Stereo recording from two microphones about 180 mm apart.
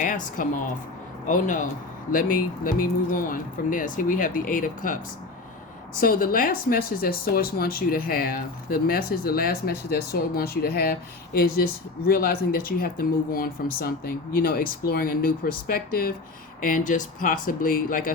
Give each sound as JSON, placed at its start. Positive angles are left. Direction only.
{"t": 0.0, "sound": "a woman's voice", "side_deg": 45}
{"t": 2.6, "sound": "speech", "side_deg": 50}
{"t": 6.0, "sound": "speech", "side_deg": 50}